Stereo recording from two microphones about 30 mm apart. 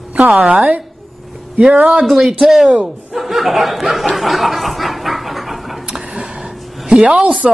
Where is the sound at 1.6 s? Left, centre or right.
Right.